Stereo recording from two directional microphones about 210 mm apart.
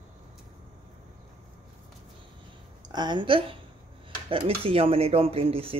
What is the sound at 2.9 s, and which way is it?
Speech, 20° right (ahead or behind).